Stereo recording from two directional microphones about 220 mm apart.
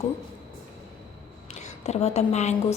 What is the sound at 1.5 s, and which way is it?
A woman's voice, 30° left (ahead or behind).